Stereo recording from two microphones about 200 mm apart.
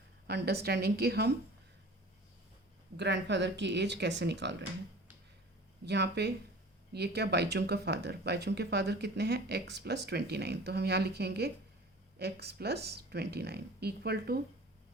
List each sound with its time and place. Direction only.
0.3 s speech: 55° right (ahead or behind)
3.0 s speech: 60° right (ahead or behind)
5.8 s speech: 60° right (ahead or behind)